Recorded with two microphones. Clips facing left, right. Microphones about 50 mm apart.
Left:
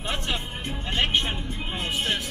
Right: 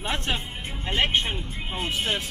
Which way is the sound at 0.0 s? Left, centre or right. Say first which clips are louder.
Right 1 dB; right.